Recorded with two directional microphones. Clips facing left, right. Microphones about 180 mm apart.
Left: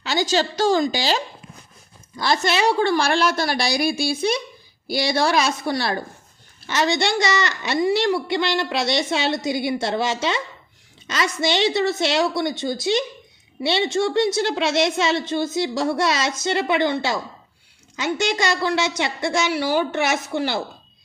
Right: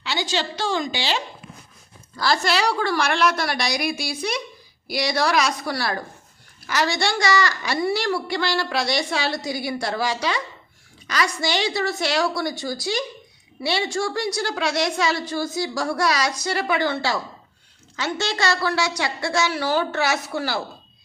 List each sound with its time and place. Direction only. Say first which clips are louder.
0.0 s a woman's voice: left 5 dB; 40° left (ahead or behind)
2.1 s a woman's voice: left 1 dB; 20° left (ahead or behind)